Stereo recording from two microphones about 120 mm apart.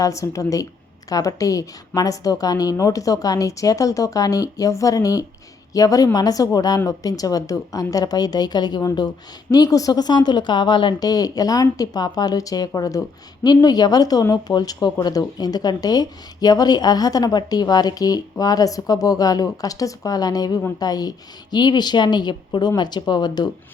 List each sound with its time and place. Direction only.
0.0 s a woman's voice: 25° left (ahead or behind)